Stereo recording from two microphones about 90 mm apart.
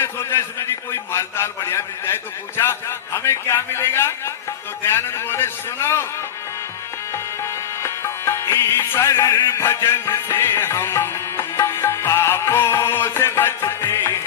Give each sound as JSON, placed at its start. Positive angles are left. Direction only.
{"t": 0.0, "sound": "a sound", "side_deg": 30}
{"t": 1.1, "sound": "speech", "side_deg": 30}
{"t": 3.2, "sound": "speech", "side_deg": 30}
{"t": 7.8, "sound": "music", "side_deg": 30}